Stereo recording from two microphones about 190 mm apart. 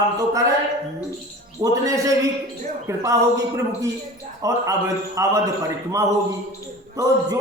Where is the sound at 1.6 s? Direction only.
15° right (ahead or behind).